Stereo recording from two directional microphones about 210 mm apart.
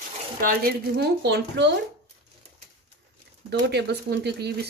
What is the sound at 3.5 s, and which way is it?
Speech, 50° right (ahead or behind).